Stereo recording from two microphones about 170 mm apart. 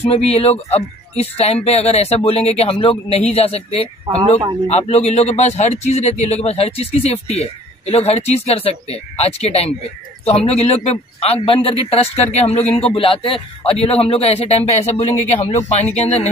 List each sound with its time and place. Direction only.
0.0 s a man's voice: 35° left (ahead or behind)